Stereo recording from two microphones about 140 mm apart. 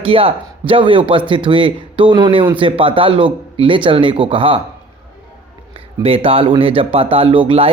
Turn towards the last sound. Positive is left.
turn(degrees=-40)  # may be behind; listen again after turning